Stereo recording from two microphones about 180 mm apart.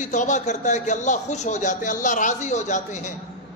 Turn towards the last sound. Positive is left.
turn(degrees=45)  # may be behind; listen again after turning